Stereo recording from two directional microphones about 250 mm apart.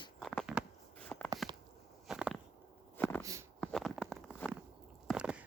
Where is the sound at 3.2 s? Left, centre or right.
Centre.